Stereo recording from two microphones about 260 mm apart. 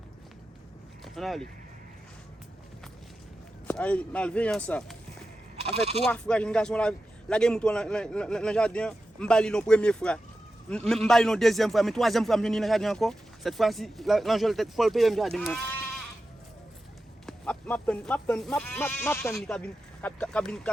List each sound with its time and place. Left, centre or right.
1.0 s speech: centre
3.7 s a man's voice: centre
5.5 s speech: right
6.1 s a man's voice: centre
17.2 s speech: centre